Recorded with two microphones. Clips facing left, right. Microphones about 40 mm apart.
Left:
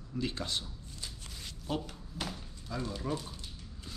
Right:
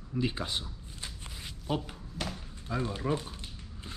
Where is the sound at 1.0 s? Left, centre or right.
Right.